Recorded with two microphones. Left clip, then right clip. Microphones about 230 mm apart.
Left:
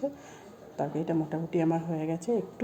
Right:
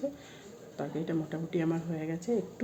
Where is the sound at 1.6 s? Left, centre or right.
Left.